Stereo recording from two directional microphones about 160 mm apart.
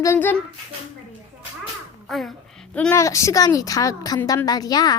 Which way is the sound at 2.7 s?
15° left (ahead or behind).